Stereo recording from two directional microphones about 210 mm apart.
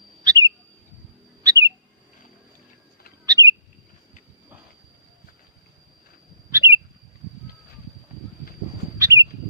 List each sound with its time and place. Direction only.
0.3 s bird: 20° right (ahead or behind)
3.2 s bird: 15° right (ahead or behind)
6.5 s squawk: 10° right (ahead or behind)
9.0 s bird: 15° right (ahead or behind)